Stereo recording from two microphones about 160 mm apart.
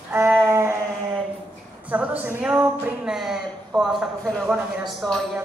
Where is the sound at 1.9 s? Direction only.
10° right (ahead or behind).